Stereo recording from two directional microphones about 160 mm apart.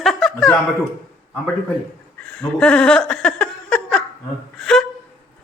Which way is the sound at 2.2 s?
5° left (ahead or behind).